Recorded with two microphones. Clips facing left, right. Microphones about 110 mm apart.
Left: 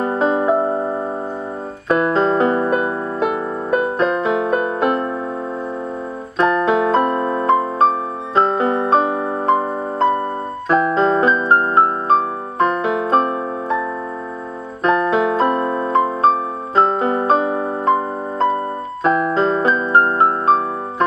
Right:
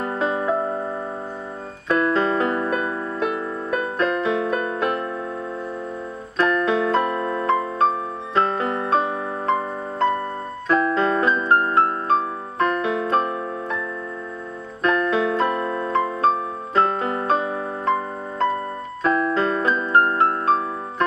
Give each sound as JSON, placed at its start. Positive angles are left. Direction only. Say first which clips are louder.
{"t": 0.0, "sound": "music", "louder": "left 6 dB", "side_deg": 30}
{"t": 1.9, "sound": "keyboard", "louder": "left 4 dB", "side_deg": 20}
{"t": 3.7, "sound": "music", "louder": "left 5 dB", "side_deg": 25}
{"t": 6.3, "sound": "piano", "louder": "left 4 dB", "side_deg": 25}
{"t": 8.4, "sound": "music", "louder": "left 5 dB", "side_deg": 25}
{"t": 10.7, "sound": "piano", "louder": "left 4 dB", "side_deg": 20}
{"t": 14.8, "sound": "piano", "louder": "left 4 dB", "side_deg": 25}
{"t": 19.0, "sound": "keyboard", "louder": "left 4 dB", "side_deg": 20}
{"t": 19.7, "sound": "music", "louder": "left 3 dB", "side_deg": 30}